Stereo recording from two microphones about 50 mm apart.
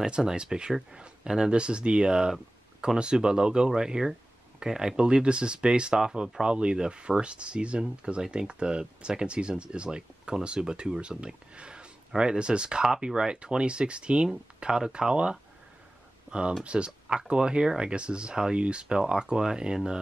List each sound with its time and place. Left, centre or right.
0.0 s speech: centre